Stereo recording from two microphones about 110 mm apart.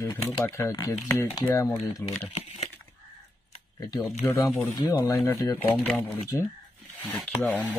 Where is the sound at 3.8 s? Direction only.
30° left (ahead or behind).